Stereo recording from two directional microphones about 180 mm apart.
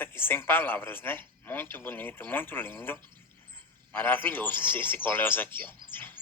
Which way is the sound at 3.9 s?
10° left (ahead or behind).